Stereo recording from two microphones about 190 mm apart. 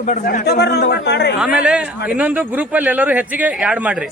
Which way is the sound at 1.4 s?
5° right (ahead or behind).